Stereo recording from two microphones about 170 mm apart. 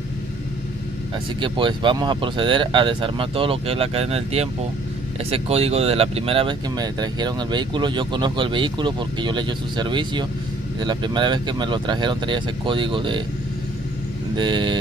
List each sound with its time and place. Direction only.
1.4 s speech: 30° right (ahead or behind)
14.3 s speech: 25° right (ahead or behind)